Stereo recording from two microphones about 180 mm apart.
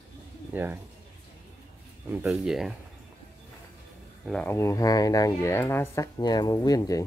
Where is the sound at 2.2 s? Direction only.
Centre (ahead or behind).